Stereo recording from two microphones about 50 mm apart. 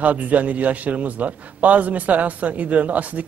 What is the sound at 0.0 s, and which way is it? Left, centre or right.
Speech, right.